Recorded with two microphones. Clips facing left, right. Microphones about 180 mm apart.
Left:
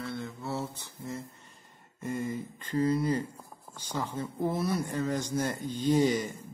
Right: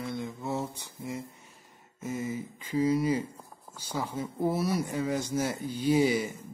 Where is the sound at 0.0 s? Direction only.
15° right (ahead or behind).